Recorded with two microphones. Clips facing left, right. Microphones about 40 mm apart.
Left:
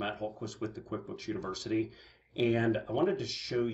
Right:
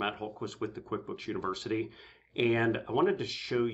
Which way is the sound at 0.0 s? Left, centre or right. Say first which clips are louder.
Right 2 dB; right.